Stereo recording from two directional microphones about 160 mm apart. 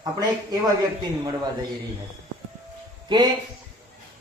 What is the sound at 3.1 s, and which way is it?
Speech, 25° right (ahead or behind).